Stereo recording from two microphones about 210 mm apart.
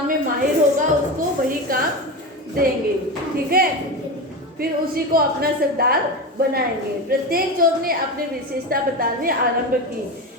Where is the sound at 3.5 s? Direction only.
45° right (ahead or behind).